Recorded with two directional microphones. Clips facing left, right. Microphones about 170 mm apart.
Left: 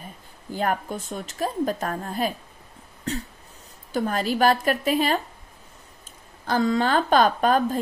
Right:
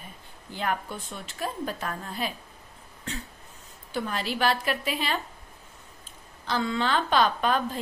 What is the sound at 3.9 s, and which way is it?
A woman's voice, 45° left (ahead or behind).